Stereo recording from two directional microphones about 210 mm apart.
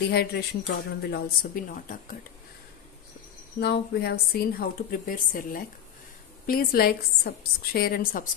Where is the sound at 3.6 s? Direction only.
50° left (ahead or behind).